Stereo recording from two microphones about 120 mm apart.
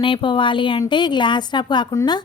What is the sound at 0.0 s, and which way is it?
Speech, 45° left (ahead or behind).